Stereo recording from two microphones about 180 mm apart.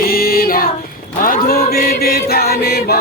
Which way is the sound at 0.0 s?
55° left (ahead or behind).